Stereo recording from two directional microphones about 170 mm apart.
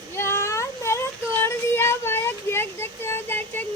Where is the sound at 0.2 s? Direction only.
15° left (ahead or behind).